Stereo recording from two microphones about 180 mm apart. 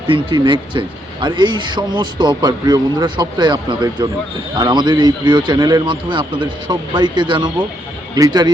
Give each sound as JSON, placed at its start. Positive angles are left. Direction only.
{"t": 0.1, "sound": "a man's voice", "side_deg": -25}